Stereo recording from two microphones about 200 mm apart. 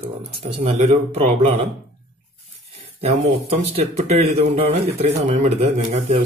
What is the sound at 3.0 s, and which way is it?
A man's voice, 30° right (ahead or behind).